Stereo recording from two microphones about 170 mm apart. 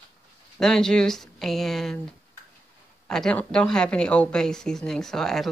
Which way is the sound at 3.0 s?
5° left (ahead or behind).